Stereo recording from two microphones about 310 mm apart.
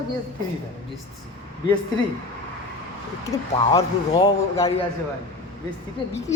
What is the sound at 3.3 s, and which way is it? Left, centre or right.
Speech, centre.